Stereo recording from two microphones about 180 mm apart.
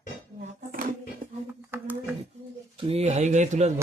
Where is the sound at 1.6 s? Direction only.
10° right (ahead or behind).